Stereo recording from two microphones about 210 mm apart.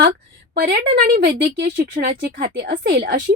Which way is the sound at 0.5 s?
50° right (ahead or behind).